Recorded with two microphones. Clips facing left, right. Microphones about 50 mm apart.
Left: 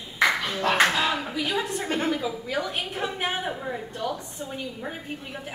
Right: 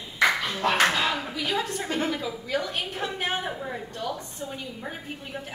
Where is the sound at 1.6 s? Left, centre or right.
Left.